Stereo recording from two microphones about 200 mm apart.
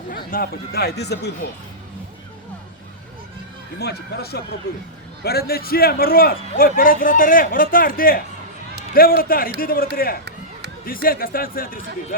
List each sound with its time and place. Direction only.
0.1 s a man's voice: 45° left (ahead or behind)
3.8 s a man's voice: 55° left (ahead or behind)